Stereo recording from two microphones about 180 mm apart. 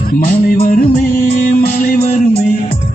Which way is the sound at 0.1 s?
55° left (ahead or behind).